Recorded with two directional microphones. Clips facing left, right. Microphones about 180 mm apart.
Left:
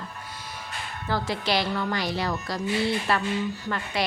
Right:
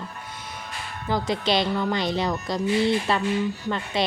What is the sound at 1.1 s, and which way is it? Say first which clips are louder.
A woman's voice: right 3 dB; 20° right (ahead or behind).